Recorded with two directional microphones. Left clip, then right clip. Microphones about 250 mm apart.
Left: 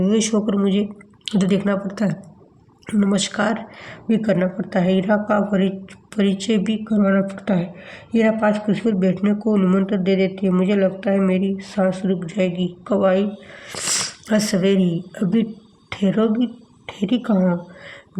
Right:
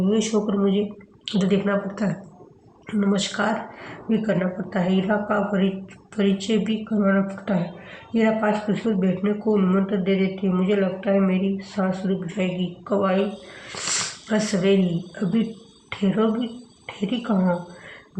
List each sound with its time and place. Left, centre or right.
0.0 s a man's voice: left